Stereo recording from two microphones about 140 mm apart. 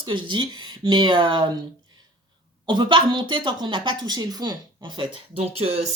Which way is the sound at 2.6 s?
35° right (ahead or behind).